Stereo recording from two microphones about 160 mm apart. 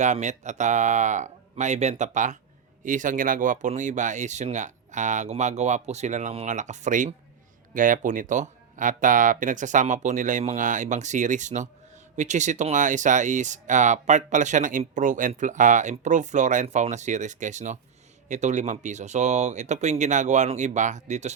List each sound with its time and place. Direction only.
0.0 s speech: 45° right (ahead or behind)